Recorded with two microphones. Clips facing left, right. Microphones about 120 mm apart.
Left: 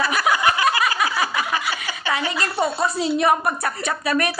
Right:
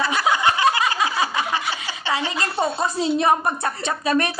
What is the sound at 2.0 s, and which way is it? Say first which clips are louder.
Speech: even; 25° right (ahead or behind).